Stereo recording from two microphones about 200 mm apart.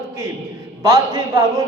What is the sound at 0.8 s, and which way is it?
Speech, 20° right (ahead or behind).